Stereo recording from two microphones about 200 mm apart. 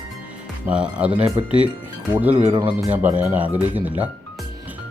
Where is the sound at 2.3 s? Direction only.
25° right (ahead or behind).